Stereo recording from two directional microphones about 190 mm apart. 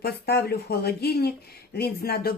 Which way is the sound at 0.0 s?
60° left (ahead or behind).